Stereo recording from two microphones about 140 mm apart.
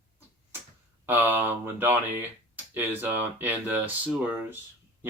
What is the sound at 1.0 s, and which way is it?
Speech, 15° right (ahead or behind).